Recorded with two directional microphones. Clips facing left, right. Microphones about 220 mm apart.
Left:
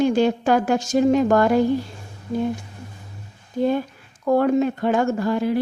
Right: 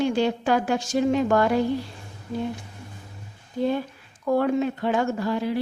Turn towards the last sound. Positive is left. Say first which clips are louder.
# left 4 dB
turn(degrees=50)  # may be behind; listen again after turning